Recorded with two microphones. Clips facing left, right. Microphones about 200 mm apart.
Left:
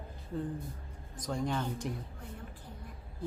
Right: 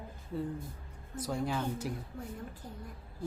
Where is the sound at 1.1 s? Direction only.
5° right (ahead or behind).